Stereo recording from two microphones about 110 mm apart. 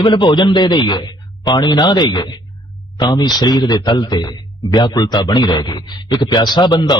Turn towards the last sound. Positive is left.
turn(degrees=40)  # may be behind; listen again after turning